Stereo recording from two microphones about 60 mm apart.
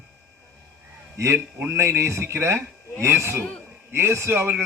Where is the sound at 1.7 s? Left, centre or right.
Right.